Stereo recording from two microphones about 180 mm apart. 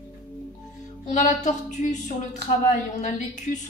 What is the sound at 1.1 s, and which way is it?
A woman's voice, 45° left (ahead or behind).